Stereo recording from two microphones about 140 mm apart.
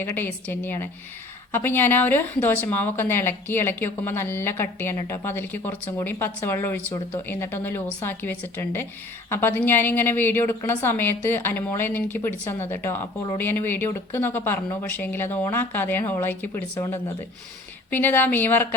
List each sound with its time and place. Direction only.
0.0 s a woman's voice: 15° left (ahead or behind)
17.9 s a woman's voice: 15° left (ahead or behind)